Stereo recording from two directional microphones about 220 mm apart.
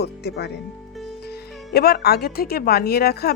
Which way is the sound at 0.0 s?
50° left (ahead or behind).